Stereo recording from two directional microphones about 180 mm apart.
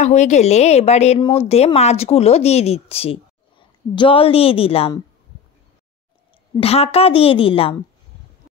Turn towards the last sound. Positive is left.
turn(degrees=30)  # may be behind; listen again after turning